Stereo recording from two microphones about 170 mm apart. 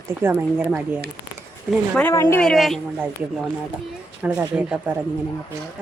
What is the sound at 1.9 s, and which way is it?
Speech, 10° left (ahead or behind).